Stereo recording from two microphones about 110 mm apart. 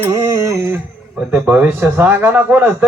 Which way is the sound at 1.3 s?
20° right (ahead or behind).